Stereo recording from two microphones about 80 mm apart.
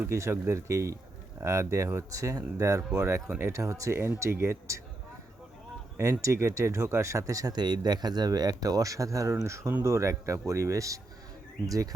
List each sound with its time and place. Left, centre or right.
0.0 s speech: right
6.0 s speech: right
7.6 s speech: right